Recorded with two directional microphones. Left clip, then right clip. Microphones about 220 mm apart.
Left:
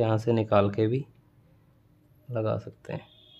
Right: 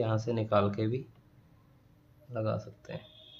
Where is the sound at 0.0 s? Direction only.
45° left (ahead or behind).